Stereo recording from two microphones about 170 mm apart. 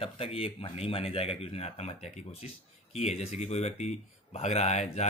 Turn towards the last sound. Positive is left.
turn(degrees=40)  # may be behind; listen again after turning